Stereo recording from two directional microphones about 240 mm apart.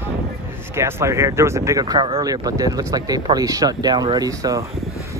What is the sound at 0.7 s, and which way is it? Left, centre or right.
Speech, centre.